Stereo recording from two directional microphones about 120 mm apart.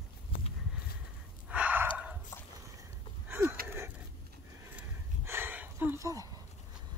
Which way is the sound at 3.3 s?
20° right (ahead or behind).